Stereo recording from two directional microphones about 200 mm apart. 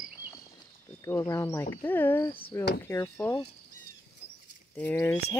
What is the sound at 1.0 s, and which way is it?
Speech, 15° left (ahead or behind).